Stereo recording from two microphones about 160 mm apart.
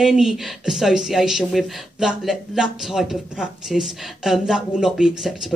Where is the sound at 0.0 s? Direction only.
5° right (ahead or behind).